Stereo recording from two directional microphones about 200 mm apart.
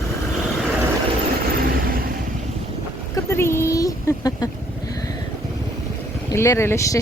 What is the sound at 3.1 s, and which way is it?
Speech, 10° left (ahead or behind).